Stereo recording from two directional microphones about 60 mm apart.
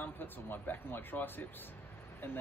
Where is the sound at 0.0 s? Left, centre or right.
Left.